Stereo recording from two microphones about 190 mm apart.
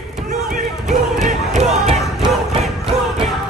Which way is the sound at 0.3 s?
40° right (ahead or behind).